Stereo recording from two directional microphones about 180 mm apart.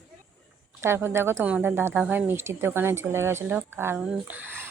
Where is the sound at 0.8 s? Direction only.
15° right (ahead or behind).